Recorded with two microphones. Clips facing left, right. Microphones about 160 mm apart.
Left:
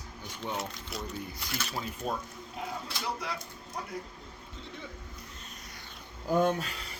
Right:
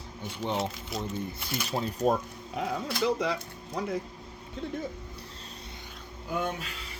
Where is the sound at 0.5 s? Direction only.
Centre (ahead or behind).